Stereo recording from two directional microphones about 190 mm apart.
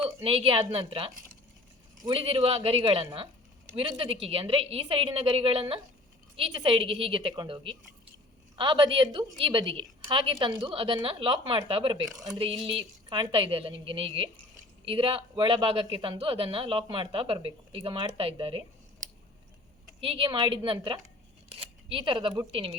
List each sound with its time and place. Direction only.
0.0 s a woman's voice: 30° right (ahead or behind)
20.0 s a woman's voice: 30° right (ahead or behind)